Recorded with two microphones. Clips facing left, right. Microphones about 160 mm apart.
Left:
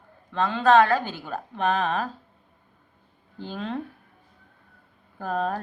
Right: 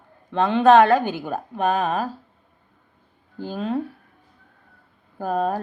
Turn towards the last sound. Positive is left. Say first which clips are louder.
# right 4 dB
turn(degrees=-10)  # may be behind; listen again after turning